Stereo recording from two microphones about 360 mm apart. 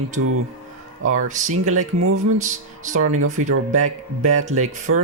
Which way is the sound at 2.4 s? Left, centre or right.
Right.